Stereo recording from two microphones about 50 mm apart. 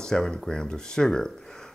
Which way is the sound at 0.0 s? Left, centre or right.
Centre.